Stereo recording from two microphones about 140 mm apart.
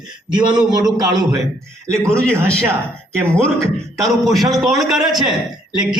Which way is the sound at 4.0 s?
Centre (ahead or behind).